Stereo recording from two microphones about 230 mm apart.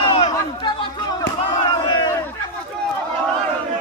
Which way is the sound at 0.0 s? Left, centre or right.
Left.